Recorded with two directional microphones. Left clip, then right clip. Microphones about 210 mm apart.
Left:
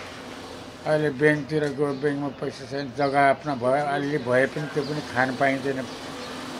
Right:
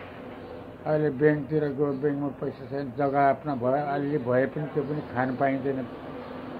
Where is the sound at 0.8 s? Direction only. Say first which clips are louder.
Left 2 dB; 15° left (ahead or behind).